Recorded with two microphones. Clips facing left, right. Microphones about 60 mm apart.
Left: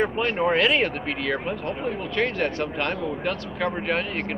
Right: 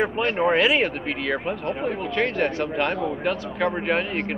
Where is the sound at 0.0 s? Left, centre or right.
Centre.